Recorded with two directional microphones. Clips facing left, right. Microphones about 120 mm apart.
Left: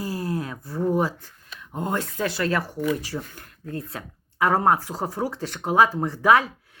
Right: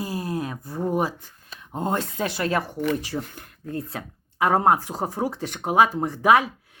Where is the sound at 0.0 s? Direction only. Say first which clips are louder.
Even; 20° right (ahead or behind).